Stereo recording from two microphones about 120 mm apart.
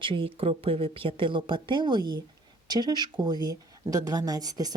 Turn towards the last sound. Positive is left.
turn(degrees=-35)  # may be behind; listen again after turning